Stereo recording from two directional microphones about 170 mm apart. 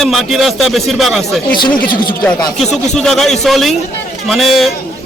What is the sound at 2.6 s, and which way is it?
Speech, 5° left (ahead or behind).